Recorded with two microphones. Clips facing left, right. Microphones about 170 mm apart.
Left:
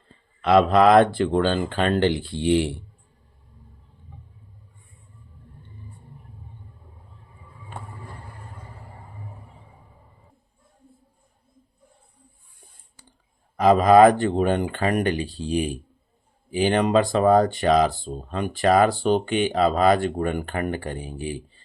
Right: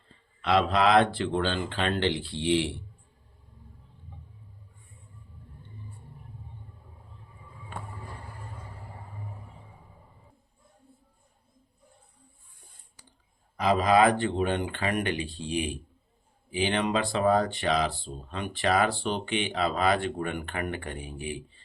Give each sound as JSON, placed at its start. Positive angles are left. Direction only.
{"t": 0.4, "sound": "speech", "side_deg": 45}
{"t": 13.6, "sound": "speech", "side_deg": 50}